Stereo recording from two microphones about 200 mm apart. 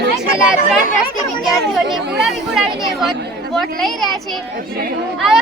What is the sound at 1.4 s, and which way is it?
Speech, centre (ahead or behind).